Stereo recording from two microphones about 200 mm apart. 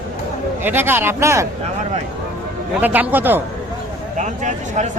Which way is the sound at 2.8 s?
10° right (ahead or behind).